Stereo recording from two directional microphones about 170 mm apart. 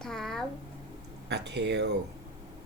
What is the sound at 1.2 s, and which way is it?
Speech, 85° right.